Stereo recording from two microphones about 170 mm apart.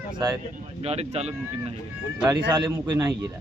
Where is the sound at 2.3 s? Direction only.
25° right (ahead or behind).